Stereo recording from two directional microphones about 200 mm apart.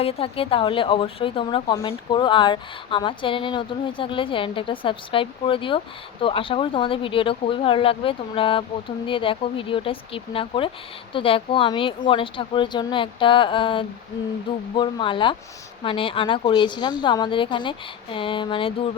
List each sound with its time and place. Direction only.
0.0 s speech: 30° left (ahead or behind)